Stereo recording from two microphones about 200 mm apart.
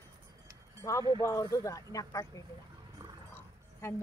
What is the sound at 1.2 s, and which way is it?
Speech, 15° left (ahead or behind).